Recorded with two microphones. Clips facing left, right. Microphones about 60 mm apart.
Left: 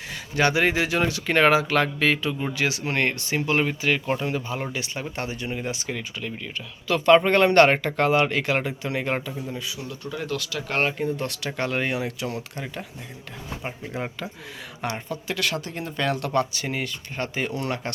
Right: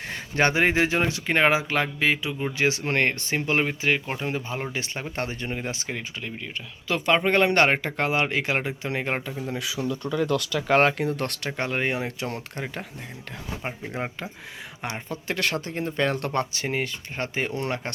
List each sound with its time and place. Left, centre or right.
0.1 s speech: right; by 2.5 s centre
2.6 s speech: right
4.7 s speech: right
6.3 s speech: centre
10.8 s speech: right
11.4 s speech: right
13.6 s speech: right
14.8 s speech: centre
15.1 s speech: right